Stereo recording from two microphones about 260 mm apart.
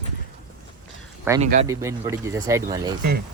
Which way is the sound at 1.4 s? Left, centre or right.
Right.